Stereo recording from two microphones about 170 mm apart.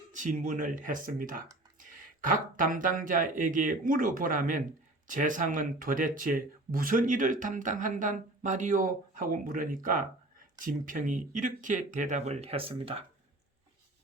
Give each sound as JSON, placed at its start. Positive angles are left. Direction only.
{"t": 0.1, "sound": "speech", "side_deg": -50}